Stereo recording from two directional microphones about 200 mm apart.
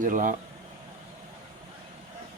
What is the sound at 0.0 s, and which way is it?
Speech, 40° right (ahead or behind).